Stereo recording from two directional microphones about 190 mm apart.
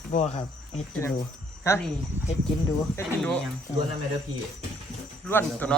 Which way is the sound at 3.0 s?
15° left (ahead or behind).